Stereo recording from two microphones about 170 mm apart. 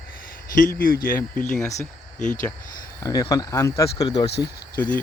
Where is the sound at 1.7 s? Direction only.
50° left (ahead or behind).